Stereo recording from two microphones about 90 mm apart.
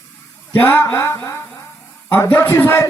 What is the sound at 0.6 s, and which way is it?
A man's voice, 25° left (ahead or behind).